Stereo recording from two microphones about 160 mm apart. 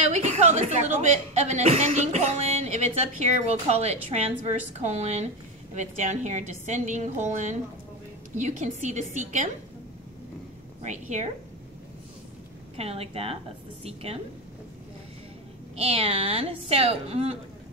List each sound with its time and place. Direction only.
0.1 s speech: 45° right (ahead or behind)
10.8 s speech: 45° right (ahead or behind)
12.7 s a woman's voice: 40° right (ahead or behind)
15.7 s a woman's voice: 35° right (ahead or behind)